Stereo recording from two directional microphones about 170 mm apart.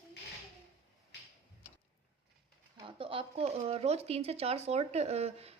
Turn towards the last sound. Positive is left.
turn(degrees=-35)  # may be behind; listen again after turning